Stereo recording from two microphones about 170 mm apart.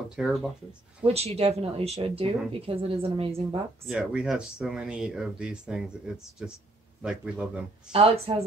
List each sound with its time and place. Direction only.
0.1 s speech: centre (ahead or behind)
1.0 s a woman's voice: 35° right (ahead or behind)
3.8 s speech: centre (ahead or behind)
7.9 s a woman's voice: 35° right (ahead or behind)